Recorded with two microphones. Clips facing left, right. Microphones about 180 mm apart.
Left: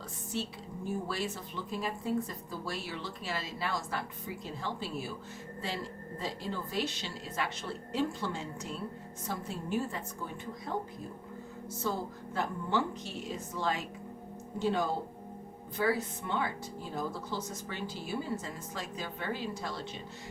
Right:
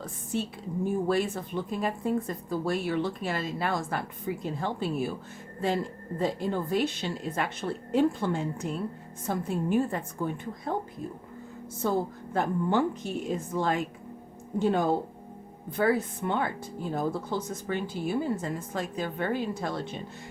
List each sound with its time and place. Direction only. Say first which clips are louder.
0.3 s a woman's voice: right 7 dB; 55° right (ahead or behind)